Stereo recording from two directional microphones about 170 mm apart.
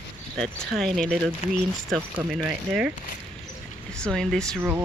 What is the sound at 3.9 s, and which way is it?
Speech, 5° left (ahead or behind).